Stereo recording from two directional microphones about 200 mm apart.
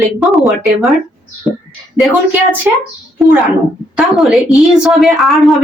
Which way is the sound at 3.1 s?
Centre (ahead or behind).